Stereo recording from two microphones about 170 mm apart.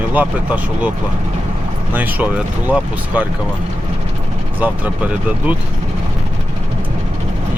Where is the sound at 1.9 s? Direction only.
10° right (ahead or behind).